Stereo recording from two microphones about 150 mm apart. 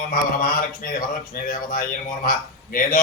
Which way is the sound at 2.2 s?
65° left (ahead or behind).